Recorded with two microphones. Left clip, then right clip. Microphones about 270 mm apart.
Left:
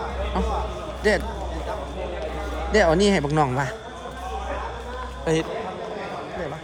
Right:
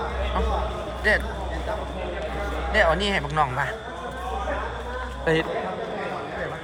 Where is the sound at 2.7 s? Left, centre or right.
Left.